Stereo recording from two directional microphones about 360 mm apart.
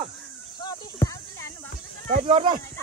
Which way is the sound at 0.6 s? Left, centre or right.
Centre.